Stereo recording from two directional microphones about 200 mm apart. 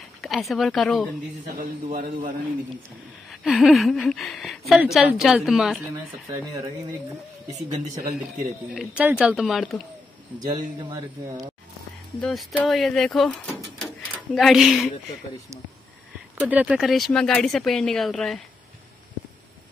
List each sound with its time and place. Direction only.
0.2 s speech: centre (ahead or behind)
1.6 s a man's voice: 45° right (ahead or behind)
3.3 s a woman's voice: centre (ahead or behind)
7.6 s speech: 20° right (ahead or behind)
8.7 s a woman's voice: 5° right (ahead or behind)
10.8 s speech: 20° right (ahead or behind)
12.2 s a woman's voice: 5° left (ahead or behind)
13.8 s a sound: centre (ahead or behind)
16.3 s a woman's voice: 10° right (ahead or behind)